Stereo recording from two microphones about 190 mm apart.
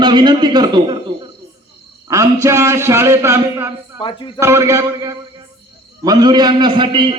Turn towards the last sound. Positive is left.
turn(degrees=-25)  # may be behind; listen again after turning